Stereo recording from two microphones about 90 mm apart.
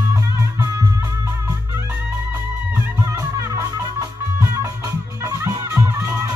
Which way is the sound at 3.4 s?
35° right (ahead or behind).